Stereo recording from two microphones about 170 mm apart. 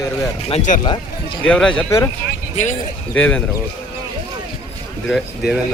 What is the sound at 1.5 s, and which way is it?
Speech, 5° left (ahead or behind).